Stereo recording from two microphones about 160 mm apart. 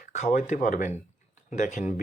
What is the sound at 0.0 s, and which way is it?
Speech, 50° left (ahead or behind).